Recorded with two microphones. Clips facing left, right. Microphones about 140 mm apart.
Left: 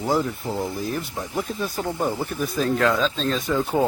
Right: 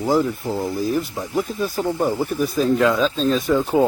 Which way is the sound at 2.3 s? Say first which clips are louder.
Right 5 dB; centre (ahead or behind).